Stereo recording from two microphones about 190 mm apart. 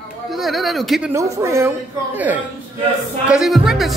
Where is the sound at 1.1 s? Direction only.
15° right (ahead or behind).